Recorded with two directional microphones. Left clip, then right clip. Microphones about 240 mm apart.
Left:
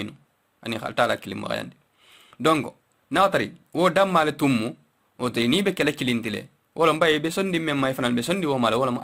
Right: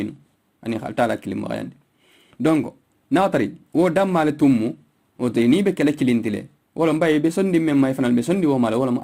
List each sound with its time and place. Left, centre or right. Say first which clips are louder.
0.6 s speech: right 2 dB; left